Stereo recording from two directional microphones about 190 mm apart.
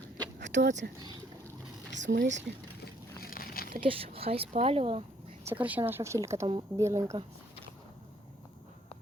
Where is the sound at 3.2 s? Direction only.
50° left (ahead or behind).